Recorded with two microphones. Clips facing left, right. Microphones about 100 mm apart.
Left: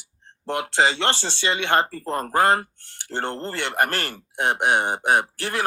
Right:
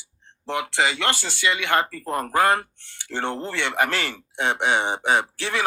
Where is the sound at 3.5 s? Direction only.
50° left (ahead or behind).